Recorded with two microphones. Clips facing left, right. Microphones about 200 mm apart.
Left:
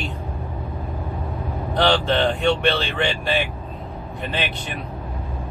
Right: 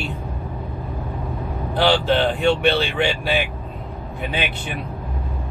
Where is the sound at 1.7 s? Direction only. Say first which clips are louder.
Right 1 dB; 5° right (ahead or behind).